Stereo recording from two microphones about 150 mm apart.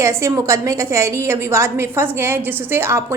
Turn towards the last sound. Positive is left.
turn(degrees=-15)  # may be behind; listen again after turning